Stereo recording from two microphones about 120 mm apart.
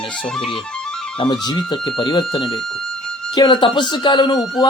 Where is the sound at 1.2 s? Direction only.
35° left (ahead or behind).